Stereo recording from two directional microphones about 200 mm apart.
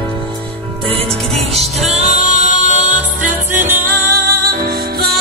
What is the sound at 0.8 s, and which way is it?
Music, 30° right (ahead or behind).